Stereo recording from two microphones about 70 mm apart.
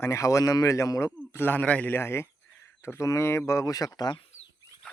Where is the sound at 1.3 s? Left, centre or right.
Left.